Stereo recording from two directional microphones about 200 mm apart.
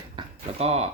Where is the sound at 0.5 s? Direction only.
30° right (ahead or behind).